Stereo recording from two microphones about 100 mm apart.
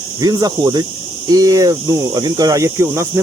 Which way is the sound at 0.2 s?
40° right (ahead or behind).